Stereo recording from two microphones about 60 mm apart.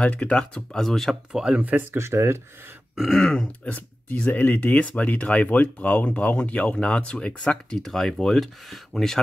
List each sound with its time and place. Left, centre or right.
0.0 s speech: centre
1.3 s speech: centre
1.6 s speech: right
2.0 s speech: right
3.2 s speech: centre
3.6 s speech: left
7.8 s speech: centre